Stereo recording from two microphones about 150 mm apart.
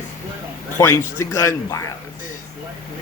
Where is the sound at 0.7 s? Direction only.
15° left (ahead or behind).